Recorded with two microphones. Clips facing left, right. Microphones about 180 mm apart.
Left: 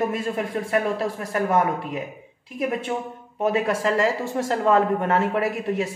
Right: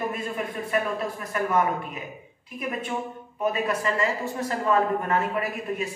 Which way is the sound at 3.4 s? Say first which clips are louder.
Left 4 dB; 90° left.